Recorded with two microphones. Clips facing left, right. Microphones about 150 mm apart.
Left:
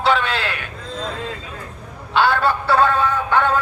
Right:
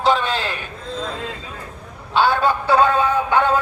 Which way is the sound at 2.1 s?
15° right (ahead or behind).